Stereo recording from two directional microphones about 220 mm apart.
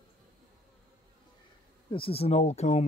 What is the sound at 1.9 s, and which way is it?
Speech, 25° left (ahead or behind).